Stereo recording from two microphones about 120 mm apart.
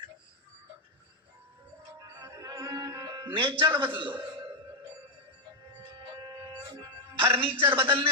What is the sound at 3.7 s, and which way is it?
Speech, 45° right (ahead or behind).